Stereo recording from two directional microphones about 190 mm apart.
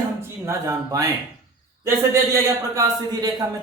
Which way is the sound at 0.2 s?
15° right (ahead or behind).